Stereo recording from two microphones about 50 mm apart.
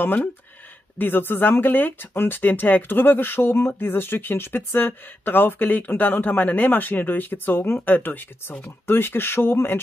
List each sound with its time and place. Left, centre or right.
0.0 s speech: left